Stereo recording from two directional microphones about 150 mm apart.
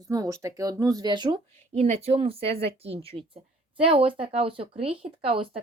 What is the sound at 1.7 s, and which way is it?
Speech, 45° right (ahead or behind).